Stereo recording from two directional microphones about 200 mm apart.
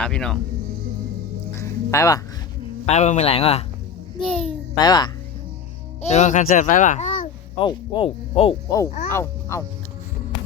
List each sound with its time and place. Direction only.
0.0 s speech: 5° left (ahead or behind)
1.5 s music: 15° left (ahead or behind)
2.8 s a child's voice: 35° left (ahead or behind)
4.2 s speech: 5° left (ahead or behind)
4.8 s speech: 20° left (ahead or behind)
6.1 s a child's voice: 35° left (ahead or behind)
7.6 s speech: 25° left (ahead or behind)
9.1 s speech: 15° left (ahead or behind)